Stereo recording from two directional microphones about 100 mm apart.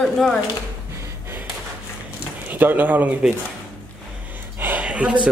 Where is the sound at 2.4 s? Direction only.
20° right (ahead or behind).